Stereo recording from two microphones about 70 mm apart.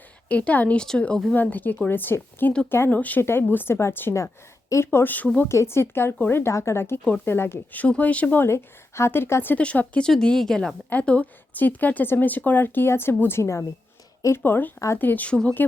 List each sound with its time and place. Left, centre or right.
0.3 s speech: left
1.3 s a woman's voice: left
5.5 s a woman's voice: left
8.4 s a woman's voice: left
9.6 s speech: centre
10.8 s a woman's voice: left